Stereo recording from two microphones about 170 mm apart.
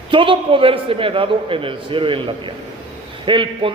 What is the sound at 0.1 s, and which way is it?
A man's voice, 30° right (ahead or behind).